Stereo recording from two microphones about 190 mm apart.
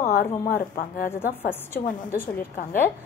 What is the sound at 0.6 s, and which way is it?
Speech, 50° left (ahead or behind).